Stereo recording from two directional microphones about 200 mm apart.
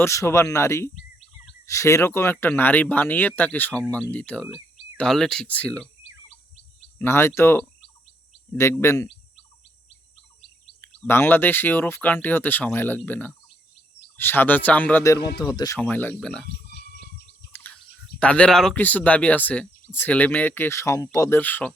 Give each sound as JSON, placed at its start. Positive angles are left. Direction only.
{"t": 0.0, "sound": "speech", "side_deg": 15}
{"t": 6.0, "sound": "bird", "side_deg": 30}
{"t": 7.0, "sound": "speech", "side_deg": 10}
{"t": 10.8, "sound": "speech", "side_deg": 10}
{"t": 17.5, "sound": "bird", "side_deg": 10}
{"t": 18.2, "sound": "speech", "side_deg": 5}